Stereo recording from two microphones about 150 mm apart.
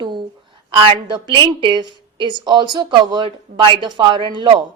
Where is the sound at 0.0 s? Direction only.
30° right (ahead or behind).